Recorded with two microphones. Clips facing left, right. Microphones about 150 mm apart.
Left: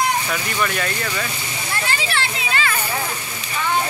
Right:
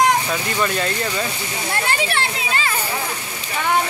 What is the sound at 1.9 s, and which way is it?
Speech, 55° right (ahead or behind).